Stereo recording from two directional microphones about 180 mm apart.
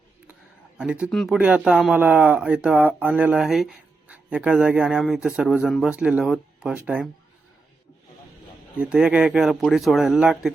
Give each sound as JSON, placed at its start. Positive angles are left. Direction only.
{"t": 0.8, "sound": "speech", "side_deg": -5}
{"t": 8.8, "sound": "speech", "side_deg": -5}